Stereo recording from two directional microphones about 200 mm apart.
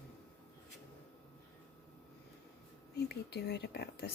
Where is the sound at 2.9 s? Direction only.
55° left (ahead or behind).